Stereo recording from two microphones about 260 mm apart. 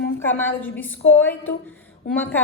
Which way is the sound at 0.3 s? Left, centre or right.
Centre.